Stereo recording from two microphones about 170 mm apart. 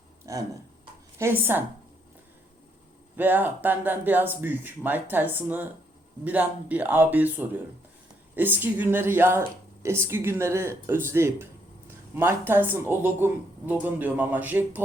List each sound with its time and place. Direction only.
0.3 s speech: 15° right (ahead or behind)
3.2 s speech: 10° right (ahead or behind)